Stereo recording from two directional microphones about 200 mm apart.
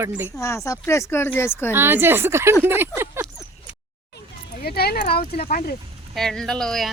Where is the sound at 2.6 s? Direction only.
10° right (ahead or behind).